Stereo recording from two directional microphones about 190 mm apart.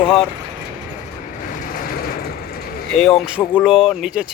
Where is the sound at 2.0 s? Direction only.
55° left (ahead or behind).